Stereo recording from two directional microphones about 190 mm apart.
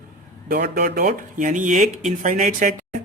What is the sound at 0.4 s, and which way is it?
Speech, 55° right (ahead or behind).